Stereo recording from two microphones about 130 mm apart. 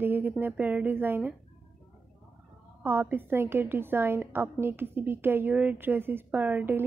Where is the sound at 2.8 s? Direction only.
15° right (ahead or behind).